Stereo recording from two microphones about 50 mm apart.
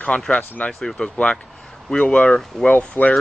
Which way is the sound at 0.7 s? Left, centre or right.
Centre.